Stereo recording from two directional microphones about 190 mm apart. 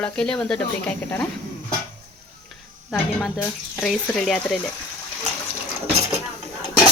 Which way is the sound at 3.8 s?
Centre (ahead or behind).